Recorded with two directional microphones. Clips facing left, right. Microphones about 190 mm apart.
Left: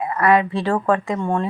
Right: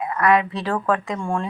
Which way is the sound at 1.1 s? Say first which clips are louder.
Left 3 dB; 20° left (ahead or behind).